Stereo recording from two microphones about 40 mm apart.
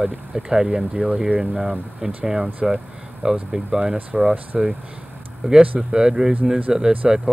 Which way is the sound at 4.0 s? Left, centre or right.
Right.